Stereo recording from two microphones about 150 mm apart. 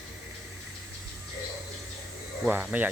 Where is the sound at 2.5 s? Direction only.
10° right (ahead or behind).